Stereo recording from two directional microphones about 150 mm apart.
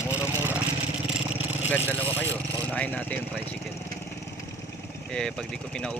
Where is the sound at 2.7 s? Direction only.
10° left (ahead or behind).